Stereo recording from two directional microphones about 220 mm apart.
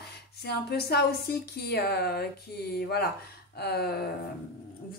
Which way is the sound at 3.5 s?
45° left (ahead or behind).